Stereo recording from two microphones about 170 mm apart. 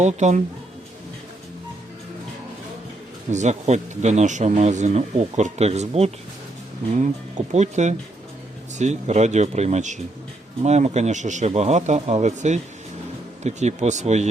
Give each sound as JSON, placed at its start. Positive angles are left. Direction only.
{"t": 0.0, "sound": "speech", "side_deg": -45}
{"t": 3.2, "sound": "speech", "side_deg": -45}
{"t": 7.5, "sound": "speech", "side_deg": -45}